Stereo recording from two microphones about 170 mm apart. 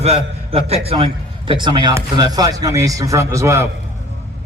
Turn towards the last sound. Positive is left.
turn(degrees=-15)  # may be behind; listen again after turning